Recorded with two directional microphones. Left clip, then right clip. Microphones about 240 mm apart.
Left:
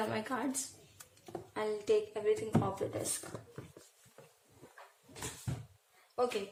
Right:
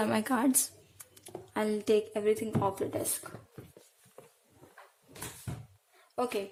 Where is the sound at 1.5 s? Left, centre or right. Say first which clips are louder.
Right 4 dB; right.